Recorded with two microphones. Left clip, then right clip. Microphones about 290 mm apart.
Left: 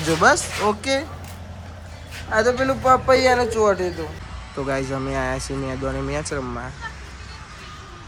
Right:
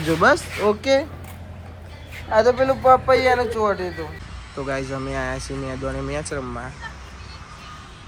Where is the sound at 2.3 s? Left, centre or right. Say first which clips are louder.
Right 2 dB; centre.